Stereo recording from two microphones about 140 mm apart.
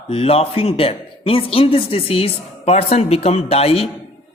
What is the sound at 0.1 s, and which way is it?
Speech, 45° left (ahead or behind).